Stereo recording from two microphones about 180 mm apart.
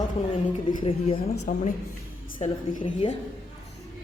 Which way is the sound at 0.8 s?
30° left (ahead or behind).